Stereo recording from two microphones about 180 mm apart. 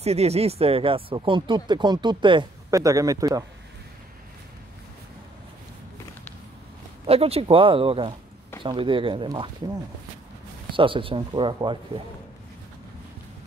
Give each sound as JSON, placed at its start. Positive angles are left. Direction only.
{"t": 0.0, "sound": "speech", "side_deg": -35}
{"t": 7.1, "sound": "speech", "side_deg": -35}
{"t": 10.7, "sound": "speech", "side_deg": -30}